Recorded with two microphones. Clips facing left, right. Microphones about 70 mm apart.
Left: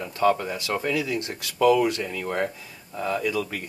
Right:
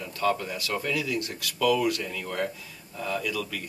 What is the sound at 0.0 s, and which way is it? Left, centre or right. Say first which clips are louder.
Speech: left 5 dB; left.